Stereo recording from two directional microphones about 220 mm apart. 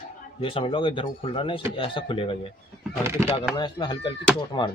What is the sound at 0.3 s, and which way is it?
Speech, 25° left (ahead or behind).